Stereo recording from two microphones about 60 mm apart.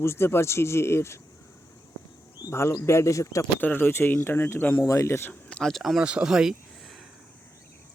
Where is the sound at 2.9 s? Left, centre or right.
Left.